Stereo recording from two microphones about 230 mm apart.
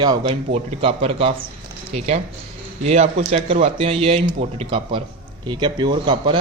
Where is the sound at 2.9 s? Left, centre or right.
Right.